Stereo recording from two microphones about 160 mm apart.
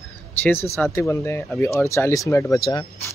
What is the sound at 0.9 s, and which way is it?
Speech, 15° left (ahead or behind).